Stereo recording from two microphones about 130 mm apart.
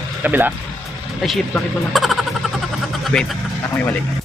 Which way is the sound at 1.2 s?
Centre (ahead or behind).